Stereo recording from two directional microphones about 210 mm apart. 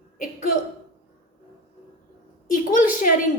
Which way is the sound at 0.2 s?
40° left (ahead or behind).